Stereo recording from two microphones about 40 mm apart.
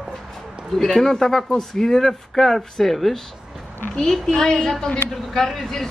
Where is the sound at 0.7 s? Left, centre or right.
Centre.